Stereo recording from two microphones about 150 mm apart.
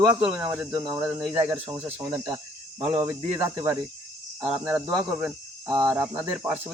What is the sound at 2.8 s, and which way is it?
Speech, 15° right (ahead or behind).